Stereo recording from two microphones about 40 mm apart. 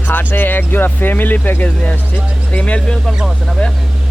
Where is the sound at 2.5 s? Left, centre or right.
Left.